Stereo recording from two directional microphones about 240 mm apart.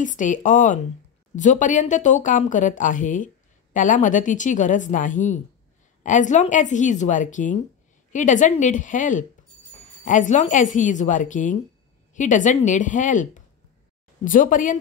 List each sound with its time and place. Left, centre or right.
0.0 s speech: left